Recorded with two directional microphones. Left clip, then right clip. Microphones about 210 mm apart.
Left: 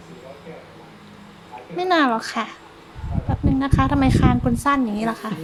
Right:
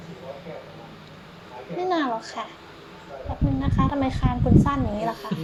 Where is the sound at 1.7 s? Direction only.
30° left (ahead or behind).